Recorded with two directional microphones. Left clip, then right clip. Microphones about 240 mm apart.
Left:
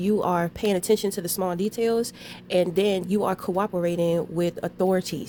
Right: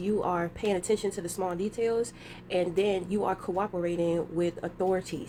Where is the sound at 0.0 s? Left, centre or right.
Left.